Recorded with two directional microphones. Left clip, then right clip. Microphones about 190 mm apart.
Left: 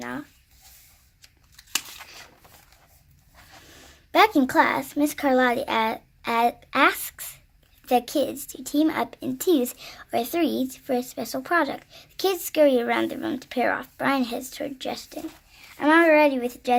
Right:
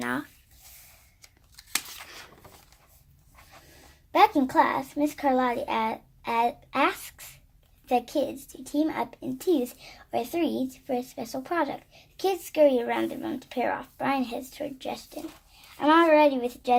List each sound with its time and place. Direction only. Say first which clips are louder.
0.0 s writing: right 3 dB; 40° right (ahead or behind)
1.7 s a sound: left 2 dB; 20° right (ahead or behind)
4.1 s a child's voice: left 2 dB; 20° left (ahead or behind)